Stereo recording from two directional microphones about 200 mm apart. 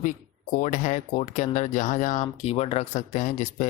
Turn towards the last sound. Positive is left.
turn(degrees=40)  # may be behind; listen again after turning